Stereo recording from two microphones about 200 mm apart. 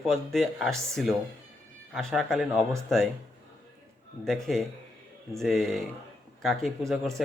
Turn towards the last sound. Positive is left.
turn(degrees=0)  # may be behind; listen again after turning